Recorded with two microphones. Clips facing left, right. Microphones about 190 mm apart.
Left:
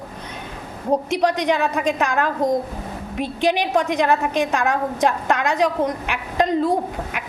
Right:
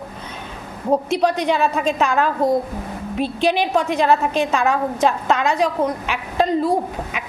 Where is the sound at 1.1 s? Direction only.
15° left (ahead or behind).